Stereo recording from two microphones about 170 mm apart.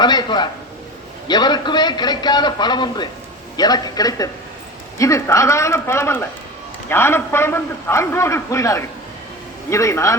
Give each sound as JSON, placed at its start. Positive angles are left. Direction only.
{"t": 0.0, "sound": "a man's voice", "side_deg": 25}